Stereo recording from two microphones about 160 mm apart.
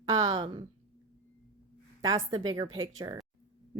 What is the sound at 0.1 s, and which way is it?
Speech, 25° right (ahead or behind).